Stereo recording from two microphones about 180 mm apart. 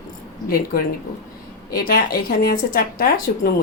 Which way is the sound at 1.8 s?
55° left (ahead or behind).